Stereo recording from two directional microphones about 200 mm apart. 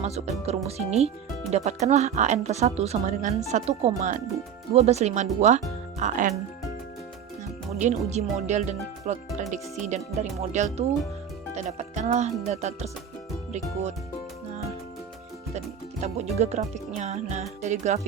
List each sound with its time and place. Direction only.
0.0 s speech: 30° right (ahead or behind)
7.8 s speech: 35° right (ahead or behind)
15.5 s speech: 35° right (ahead or behind)